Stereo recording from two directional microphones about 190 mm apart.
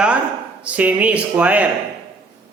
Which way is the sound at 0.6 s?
5° right (ahead or behind).